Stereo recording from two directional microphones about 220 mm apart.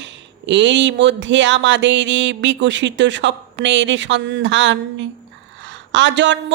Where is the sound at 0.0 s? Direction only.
55° right (ahead or behind).